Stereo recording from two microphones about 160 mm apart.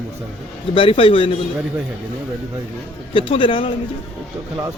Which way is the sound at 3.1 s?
35° left (ahead or behind).